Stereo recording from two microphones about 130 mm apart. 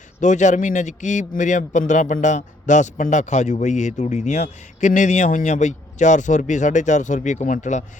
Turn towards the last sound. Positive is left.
turn(degrees=70)  # may be behind; listen again after turning